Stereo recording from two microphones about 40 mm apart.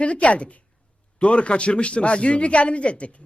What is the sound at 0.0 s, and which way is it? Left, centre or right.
Speech, left.